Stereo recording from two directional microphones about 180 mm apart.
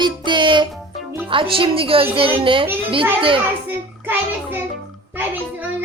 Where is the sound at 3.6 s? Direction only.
10° right (ahead or behind).